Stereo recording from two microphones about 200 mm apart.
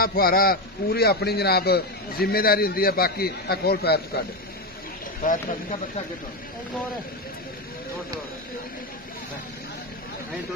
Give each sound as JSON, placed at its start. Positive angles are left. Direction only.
{"t": 0.0, "sound": "a man's voice", "side_deg": 50}
{"t": 5.2, "sound": "a man's voice", "side_deg": 45}